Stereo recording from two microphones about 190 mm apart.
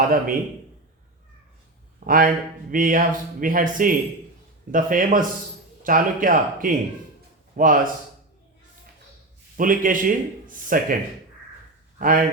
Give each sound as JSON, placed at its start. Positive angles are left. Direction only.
{"t": 0.0, "sound": "a man's voice", "side_deg": -50}
{"t": 2.0, "sound": "speech", "side_deg": -45}
{"t": 9.6, "sound": "speech", "side_deg": -45}
{"t": 11.9, "sound": "speech", "side_deg": -45}